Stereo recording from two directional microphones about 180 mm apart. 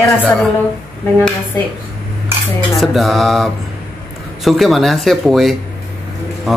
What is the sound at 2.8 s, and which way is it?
Speech, centre (ahead or behind).